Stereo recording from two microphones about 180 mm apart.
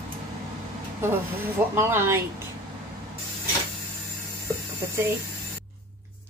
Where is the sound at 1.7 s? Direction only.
15° right (ahead or behind).